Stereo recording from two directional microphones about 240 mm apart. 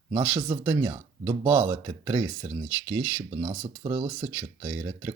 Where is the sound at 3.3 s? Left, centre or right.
Right.